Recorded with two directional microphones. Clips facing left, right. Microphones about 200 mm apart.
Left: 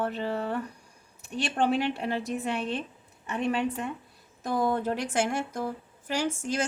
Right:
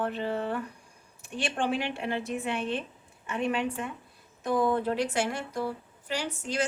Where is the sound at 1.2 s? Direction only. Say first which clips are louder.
Left 3 dB; 40° left (ahead or behind).